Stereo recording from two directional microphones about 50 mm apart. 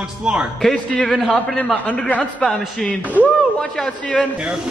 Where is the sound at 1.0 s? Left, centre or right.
Centre.